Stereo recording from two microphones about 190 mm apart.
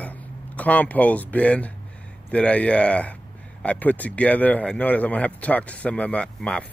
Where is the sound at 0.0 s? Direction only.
10° left (ahead or behind).